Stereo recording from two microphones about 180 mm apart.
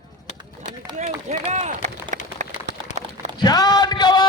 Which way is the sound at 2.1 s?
45° right (ahead or behind).